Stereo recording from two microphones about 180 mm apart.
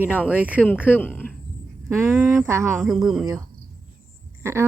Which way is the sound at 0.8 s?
10° left (ahead or behind).